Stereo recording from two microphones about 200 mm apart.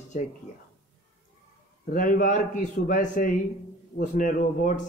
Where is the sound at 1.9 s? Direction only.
45° left (ahead or behind).